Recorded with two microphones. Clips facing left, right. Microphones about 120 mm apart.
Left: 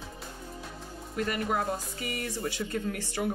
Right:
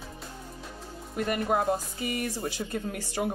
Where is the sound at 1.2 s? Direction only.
30° right (ahead or behind).